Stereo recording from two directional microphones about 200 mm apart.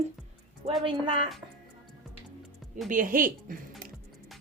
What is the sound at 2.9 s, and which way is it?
Speech, 45° right (ahead or behind).